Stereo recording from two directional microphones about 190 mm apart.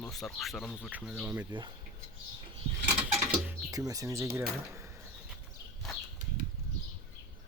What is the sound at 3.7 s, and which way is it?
Speech, 20° right (ahead or behind).